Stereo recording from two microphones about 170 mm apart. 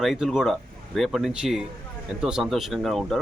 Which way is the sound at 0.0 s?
Centre (ahead or behind).